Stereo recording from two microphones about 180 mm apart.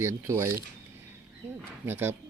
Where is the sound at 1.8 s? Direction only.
10° right (ahead or behind).